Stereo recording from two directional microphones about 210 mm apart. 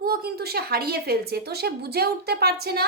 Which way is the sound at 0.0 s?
45° right (ahead or behind).